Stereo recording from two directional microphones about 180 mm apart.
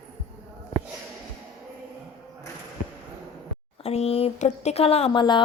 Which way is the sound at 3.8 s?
35° left (ahead or behind).